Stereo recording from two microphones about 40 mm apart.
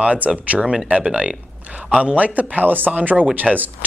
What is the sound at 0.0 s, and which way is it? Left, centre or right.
Speech, right.